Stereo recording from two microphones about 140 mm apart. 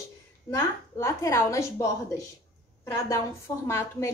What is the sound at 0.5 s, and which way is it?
A woman's voice, 20° left (ahead or behind).